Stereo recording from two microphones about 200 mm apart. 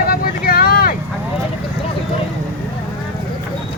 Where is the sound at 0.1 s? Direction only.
45° left (ahead or behind).